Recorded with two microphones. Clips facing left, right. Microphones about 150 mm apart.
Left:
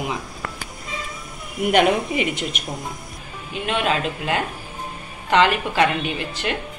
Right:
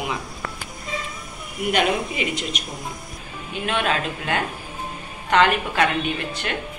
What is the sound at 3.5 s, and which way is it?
A woman's voice, 30° left (ahead or behind).